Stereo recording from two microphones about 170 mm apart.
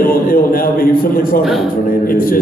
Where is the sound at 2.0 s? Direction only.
55° left (ahead or behind).